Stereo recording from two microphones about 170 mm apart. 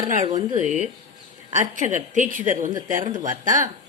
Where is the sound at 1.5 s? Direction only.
45° right (ahead or behind).